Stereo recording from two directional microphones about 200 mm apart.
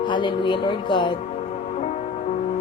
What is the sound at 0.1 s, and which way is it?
Speech, 25° left (ahead or behind).